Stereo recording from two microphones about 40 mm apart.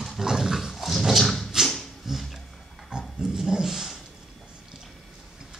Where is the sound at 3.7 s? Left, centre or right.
Centre.